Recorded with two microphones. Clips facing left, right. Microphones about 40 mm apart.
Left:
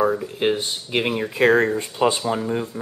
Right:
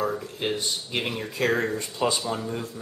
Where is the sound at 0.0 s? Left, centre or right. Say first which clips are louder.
Left 7 dB; left.